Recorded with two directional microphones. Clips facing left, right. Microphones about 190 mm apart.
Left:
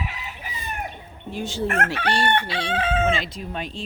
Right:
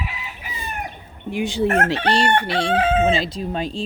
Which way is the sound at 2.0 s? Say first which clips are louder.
Right 4 dB; 30° right (ahead or behind).